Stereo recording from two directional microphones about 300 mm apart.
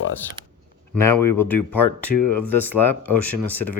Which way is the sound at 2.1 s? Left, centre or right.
Left.